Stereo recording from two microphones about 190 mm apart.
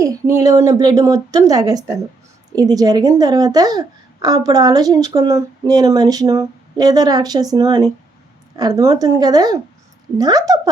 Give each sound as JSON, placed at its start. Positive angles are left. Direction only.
{"t": 0.0, "sound": "a woman's voice", "side_deg": -15}